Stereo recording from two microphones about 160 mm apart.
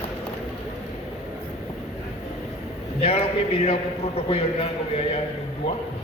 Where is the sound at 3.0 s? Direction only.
40° left (ahead or behind).